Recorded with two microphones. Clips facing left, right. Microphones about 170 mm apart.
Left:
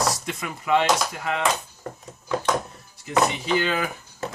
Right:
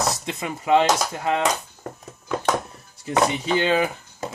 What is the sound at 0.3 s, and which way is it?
Speech, 25° right (ahead or behind).